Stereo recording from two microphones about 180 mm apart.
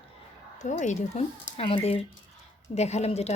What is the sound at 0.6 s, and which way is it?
A woman's voice, 40° left (ahead or behind).